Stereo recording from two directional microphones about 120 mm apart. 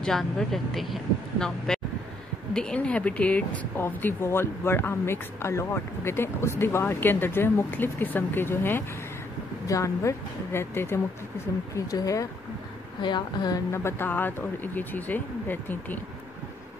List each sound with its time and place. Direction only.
0.0 s speech: 5° left (ahead or behind)
1.7 s vehicle: 5° left (ahead or behind)
2.5 s a woman's voice: 10° left (ahead or behind); by 13.6 s 40° left (ahead or behind)
13.7 s speech: 20° left (ahead or behind)